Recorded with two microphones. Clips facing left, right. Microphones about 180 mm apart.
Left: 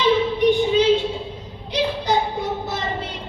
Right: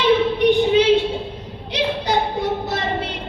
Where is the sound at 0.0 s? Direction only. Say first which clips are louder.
Right 1 dB; 65° right (ahead or behind).